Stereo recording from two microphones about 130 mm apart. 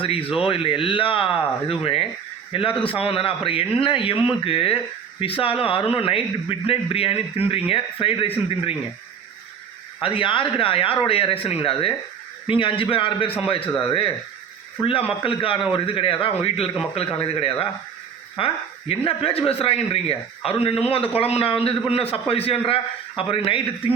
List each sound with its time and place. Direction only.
0.0 s speech: 45° left (ahead or behind)
10.0 s a man's voice: 45° left (ahead or behind)